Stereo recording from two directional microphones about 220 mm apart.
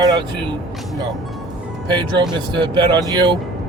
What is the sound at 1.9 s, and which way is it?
Speech, 20° right (ahead or behind).